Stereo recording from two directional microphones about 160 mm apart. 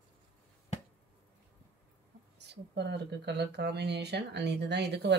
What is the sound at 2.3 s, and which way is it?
Speech, 90° right.